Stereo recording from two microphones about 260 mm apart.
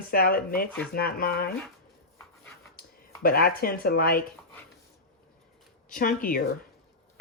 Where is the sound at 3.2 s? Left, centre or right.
Left.